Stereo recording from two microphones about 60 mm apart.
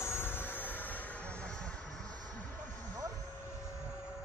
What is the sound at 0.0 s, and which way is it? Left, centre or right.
Vehicle, left.